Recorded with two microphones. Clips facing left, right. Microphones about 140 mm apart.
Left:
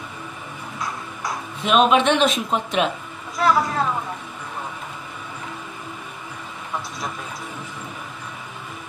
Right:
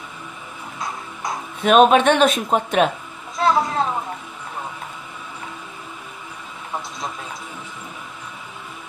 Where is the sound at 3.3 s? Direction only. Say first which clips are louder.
Right 1 dB; 25° right (ahead or behind).